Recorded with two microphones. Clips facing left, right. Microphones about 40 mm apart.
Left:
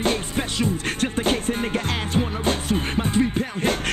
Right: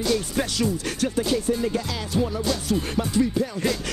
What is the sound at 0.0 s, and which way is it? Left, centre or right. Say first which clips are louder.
Music: even; left.